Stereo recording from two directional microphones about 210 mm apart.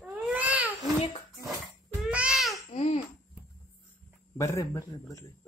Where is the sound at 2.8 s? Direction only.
30° left (ahead or behind).